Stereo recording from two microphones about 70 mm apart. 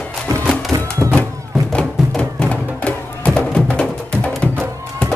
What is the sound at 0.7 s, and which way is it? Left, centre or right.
Music, right.